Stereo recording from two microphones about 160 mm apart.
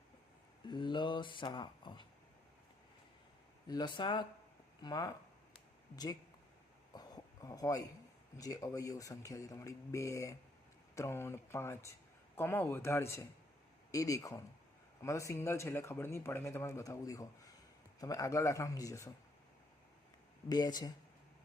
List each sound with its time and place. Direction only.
0.7 s a man's voice: 30° left (ahead or behind)
3.7 s a man's voice: 25° left (ahead or behind)
6.9 s a sound: 25° left (ahead or behind)
8.4 s a man's voice: 20° left (ahead or behind)
20.5 s a man's voice: 25° left (ahead or behind)